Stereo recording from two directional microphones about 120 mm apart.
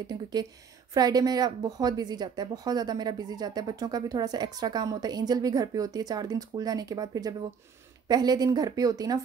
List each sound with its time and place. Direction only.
0.0 s speech: 35° right (ahead or behind)